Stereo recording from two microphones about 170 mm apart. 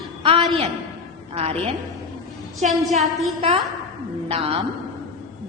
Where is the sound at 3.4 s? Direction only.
35° right (ahead or behind).